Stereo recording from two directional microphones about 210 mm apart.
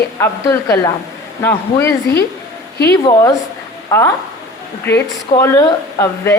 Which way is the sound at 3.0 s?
15° left (ahead or behind).